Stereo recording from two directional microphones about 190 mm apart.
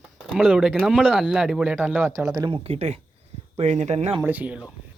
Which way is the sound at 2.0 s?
15° right (ahead or behind).